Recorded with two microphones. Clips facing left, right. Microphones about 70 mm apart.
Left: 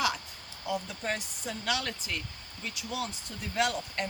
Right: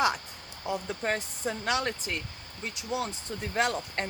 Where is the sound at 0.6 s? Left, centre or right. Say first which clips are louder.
Right 2 dB; right.